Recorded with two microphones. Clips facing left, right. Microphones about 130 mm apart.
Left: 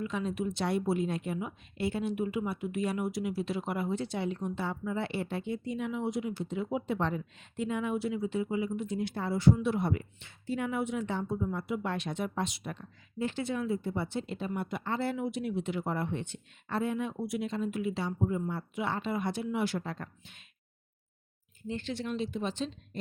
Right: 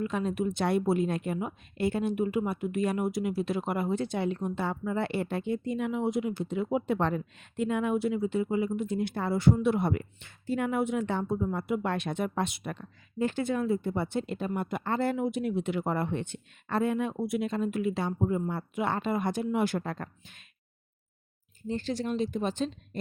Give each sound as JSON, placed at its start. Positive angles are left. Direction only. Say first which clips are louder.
{"t": 0.0, "sound": "speech", "louder": "right 3 dB", "side_deg": -50}
{"t": 21.7, "sound": "speech", "louder": "right 4 dB", "side_deg": -35}